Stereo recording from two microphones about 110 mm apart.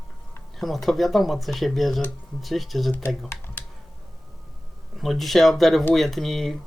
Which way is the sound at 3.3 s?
20° left (ahead or behind).